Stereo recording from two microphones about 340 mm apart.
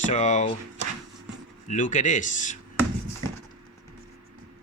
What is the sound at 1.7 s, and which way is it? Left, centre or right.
Speech, left.